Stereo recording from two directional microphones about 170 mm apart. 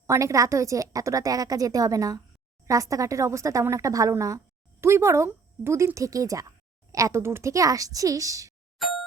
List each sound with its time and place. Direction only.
0.1 s a woman's voice: 20° right (ahead or behind)
8.8 s music: centre (ahead or behind)